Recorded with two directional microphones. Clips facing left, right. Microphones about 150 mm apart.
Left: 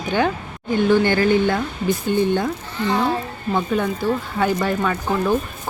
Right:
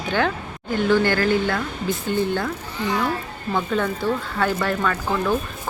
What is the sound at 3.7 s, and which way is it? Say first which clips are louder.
Speech: left 1 dB; 15° left (ahead or behind).